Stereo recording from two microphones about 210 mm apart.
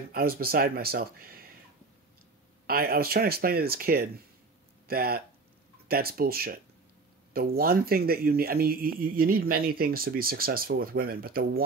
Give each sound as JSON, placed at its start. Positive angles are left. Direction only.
{"t": 0.1, "sound": "speech", "side_deg": -45}
{"t": 2.6, "sound": "speech", "side_deg": -45}